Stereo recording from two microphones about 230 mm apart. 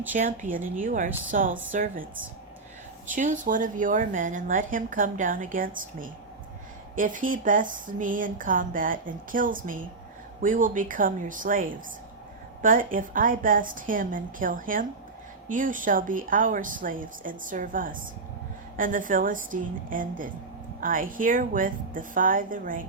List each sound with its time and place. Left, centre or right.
0.1 s speech: right
3.1 s speech: right